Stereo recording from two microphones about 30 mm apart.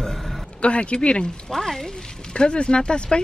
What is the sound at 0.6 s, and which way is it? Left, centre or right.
Speech, left.